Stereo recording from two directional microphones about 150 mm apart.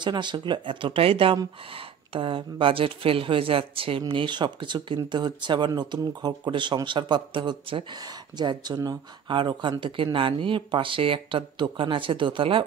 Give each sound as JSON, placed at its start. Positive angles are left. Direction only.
{"t": 0.0, "sound": "speech", "side_deg": -30}